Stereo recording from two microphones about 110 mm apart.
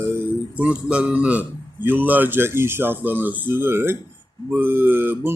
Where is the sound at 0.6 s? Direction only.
10° right (ahead or behind).